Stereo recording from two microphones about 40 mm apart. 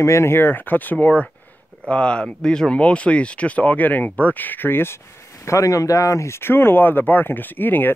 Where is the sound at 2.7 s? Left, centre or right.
Left.